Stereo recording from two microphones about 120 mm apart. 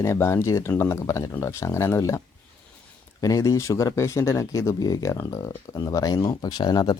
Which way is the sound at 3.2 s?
30° left (ahead or behind).